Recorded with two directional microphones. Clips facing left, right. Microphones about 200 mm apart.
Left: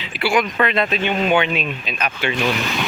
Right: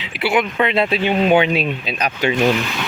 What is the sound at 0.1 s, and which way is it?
Speech, 65° right (ahead or behind).